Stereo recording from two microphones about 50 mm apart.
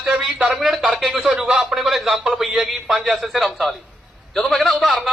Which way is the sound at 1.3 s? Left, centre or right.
Centre.